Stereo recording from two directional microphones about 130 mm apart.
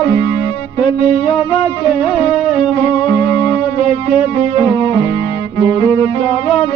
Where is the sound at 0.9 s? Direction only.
45° left (ahead or behind).